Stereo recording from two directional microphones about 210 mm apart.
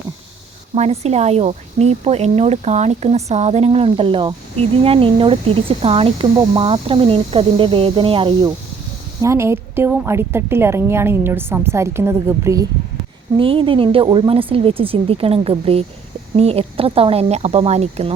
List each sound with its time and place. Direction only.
0.8 s a woman's voice: 30° right (ahead or behind); by 12.6 s 15° right (ahead or behind)
13.3 s speech: 25° right (ahead or behind)